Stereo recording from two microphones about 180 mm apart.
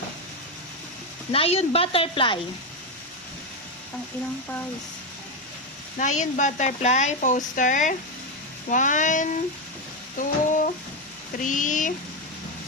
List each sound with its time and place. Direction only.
1.3 s speech: 35° left (ahead or behind)
6.0 s speech: 45° left (ahead or behind)
10.2 s a sound: 45° left (ahead or behind)
11.4 s speech: 45° left (ahead or behind)